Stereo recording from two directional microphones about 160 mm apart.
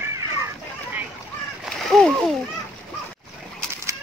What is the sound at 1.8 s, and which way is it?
Splash, 5° left (ahead or behind).